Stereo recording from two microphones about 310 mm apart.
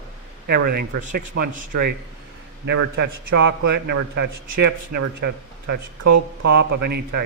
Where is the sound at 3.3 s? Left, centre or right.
Right.